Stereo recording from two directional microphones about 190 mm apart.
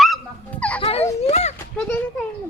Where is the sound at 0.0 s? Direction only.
5° left (ahead or behind).